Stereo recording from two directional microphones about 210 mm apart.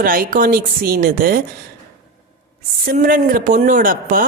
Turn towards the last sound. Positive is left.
turn(degrees=-40)  # may be behind; listen again after turning